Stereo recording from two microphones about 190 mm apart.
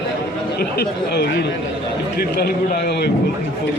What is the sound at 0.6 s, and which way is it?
A man's voice, 55° left (ahead or behind).